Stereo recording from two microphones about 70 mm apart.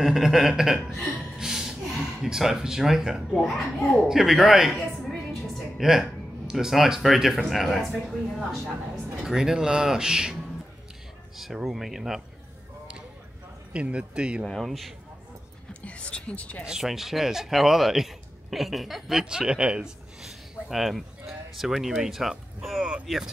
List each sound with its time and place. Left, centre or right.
0.0 s speech: centre
3.3 s a woman's voice: centre
11.3 s speech: centre
13.7 s speech: centre
14.4 s speech: centre
15.7 s speech: centre
16.6 s speech: centre